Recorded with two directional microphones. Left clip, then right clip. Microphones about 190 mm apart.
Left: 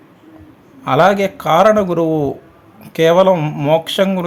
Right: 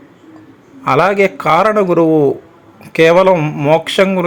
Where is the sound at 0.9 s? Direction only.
15° right (ahead or behind).